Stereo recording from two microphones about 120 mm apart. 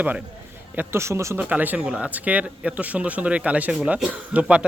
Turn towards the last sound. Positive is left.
turn(degrees=-10)  # may be behind; listen again after turning